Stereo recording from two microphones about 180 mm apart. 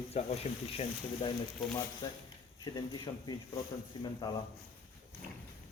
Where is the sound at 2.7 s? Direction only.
25° left (ahead or behind).